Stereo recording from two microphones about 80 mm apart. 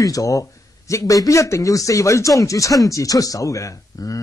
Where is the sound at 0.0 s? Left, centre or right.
Left.